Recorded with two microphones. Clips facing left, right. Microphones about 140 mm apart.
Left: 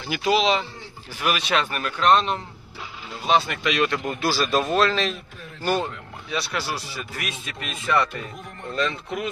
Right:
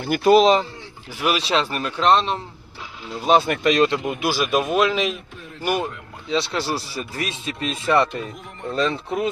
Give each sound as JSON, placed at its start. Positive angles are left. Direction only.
{"t": 0.0, "sound": "a man's voice", "side_deg": -50}
{"t": 1.3, "sound": "speech", "side_deg": -30}
{"t": 3.2, "sound": "a man's voice", "side_deg": -50}
{"t": 3.8, "sound": "a man's voice", "side_deg": -25}
{"t": 6.2, "sound": "speech", "side_deg": -25}